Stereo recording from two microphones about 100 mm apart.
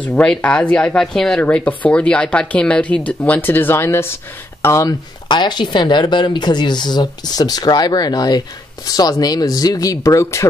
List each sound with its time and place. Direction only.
0.1 s speech: 10° left (ahead or behind)
1.4 s speech: 15° left (ahead or behind)
5.3 s speech: 50° left (ahead or behind); by 10.5 s 30° left (ahead or behind)